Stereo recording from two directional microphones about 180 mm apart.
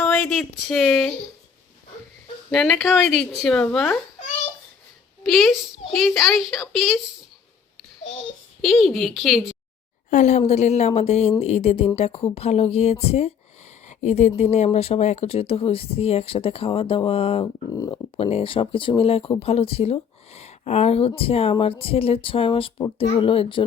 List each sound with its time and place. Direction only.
0.0 s speech: 5° left (ahead or behind)
2.5 s speech: centre (ahead or behind)
5.2 s speech: centre (ahead or behind)
8.6 s speech: centre (ahead or behind)
10.1 s speech: 40° left (ahead or behind)
17.7 s speech: 20° left (ahead or behind)
18.2 s speech: 35° left (ahead or behind)